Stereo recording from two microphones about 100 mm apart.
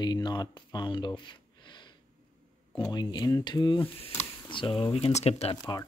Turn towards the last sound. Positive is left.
turn(degrees=45)  # may be behind; listen again after turning